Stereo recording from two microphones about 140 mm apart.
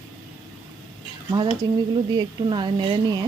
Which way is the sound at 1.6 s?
25° right (ahead or behind).